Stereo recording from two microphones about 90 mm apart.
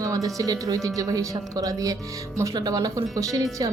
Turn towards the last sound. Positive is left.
turn(degrees=-40)  # may be behind; listen again after turning